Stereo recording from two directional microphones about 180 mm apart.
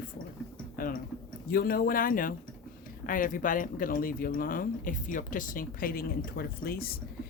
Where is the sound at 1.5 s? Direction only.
55° left (ahead or behind).